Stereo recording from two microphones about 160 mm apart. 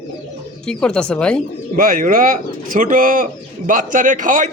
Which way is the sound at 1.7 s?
60° right (ahead or behind).